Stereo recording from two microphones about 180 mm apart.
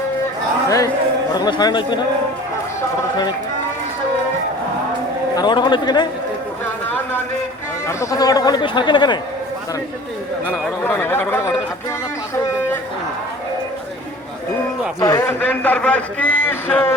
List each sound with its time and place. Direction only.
1.3 s speech: 25° left (ahead or behind)
5.4 s speech: 25° left (ahead or behind)
7.9 s speech: 20° left (ahead or behind)
10.5 s a man's voice: 10° left (ahead or behind)
15.0 s a man's voice: 15° left (ahead or behind)